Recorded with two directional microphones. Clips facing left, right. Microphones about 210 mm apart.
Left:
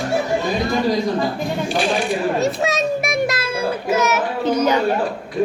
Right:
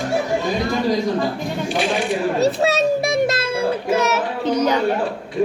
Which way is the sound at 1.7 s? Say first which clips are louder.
Even; 20° right (ahead or behind).